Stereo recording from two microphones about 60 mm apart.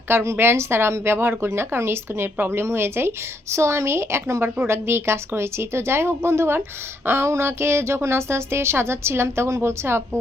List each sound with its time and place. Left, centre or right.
0.1 s a woman's voice: right